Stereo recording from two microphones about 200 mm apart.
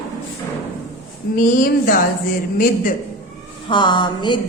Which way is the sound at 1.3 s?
45° left (ahead or behind).